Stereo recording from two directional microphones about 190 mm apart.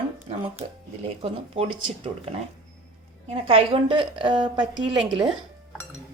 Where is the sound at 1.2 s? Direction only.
30° right (ahead or behind).